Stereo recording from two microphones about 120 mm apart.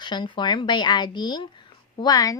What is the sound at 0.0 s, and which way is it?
A woman's voice, 40° left (ahead or behind).